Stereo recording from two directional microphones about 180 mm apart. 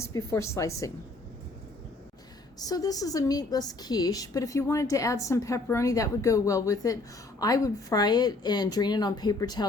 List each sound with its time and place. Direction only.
0.0 s a woman's voice: 15° left (ahead or behind)
2.6 s a woman's voice: 20° left (ahead or behind)